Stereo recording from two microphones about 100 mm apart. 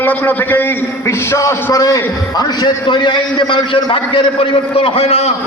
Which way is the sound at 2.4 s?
45° left (ahead or behind).